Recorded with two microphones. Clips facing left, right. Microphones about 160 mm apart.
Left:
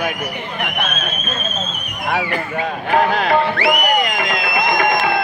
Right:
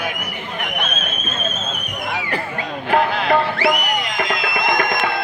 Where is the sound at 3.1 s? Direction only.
50° left (ahead or behind).